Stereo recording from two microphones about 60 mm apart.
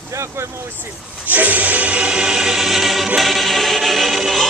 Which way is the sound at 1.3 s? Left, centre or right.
Right.